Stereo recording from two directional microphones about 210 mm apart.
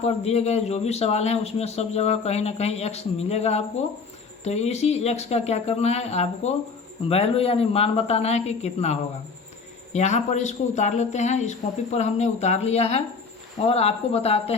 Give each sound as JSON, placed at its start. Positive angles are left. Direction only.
{"t": 0.0, "sound": "a woman's voice", "side_deg": 30}